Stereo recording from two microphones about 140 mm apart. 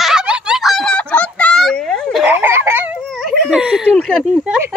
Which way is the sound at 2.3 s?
15° right (ahead or behind).